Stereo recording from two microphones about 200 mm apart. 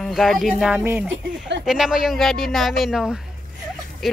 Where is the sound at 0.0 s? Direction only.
Centre (ahead or behind).